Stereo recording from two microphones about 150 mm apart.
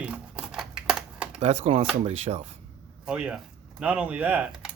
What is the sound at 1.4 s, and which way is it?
Speech, 45° right (ahead or behind).